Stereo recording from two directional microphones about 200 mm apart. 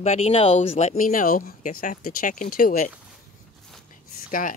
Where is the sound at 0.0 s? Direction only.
35° left (ahead or behind).